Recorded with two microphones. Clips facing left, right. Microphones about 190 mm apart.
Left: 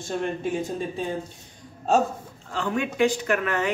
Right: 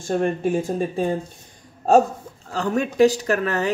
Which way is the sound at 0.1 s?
50° right (ahead or behind).